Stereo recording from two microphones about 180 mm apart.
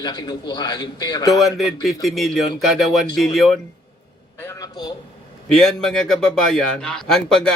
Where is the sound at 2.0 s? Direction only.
Centre (ahead or behind).